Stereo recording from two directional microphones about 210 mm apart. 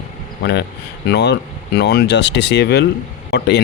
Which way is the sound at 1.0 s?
55° left (ahead or behind).